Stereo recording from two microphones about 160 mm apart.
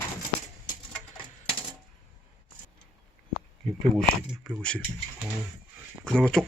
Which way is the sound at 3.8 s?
Centre (ahead or behind).